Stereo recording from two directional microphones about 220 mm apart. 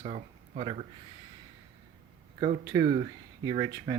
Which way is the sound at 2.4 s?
20° right (ahead or behind).